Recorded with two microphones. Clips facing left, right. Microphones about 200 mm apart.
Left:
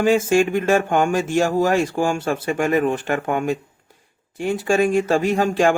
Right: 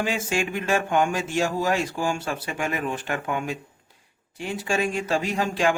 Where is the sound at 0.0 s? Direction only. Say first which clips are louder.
Left 10 dB; 45° left (ahead or behind).